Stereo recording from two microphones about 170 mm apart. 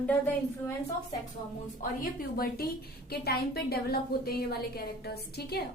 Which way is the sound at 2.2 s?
60° left (ahead or behind).